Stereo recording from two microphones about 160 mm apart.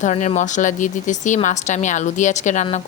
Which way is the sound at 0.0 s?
45° left (ahead or behind).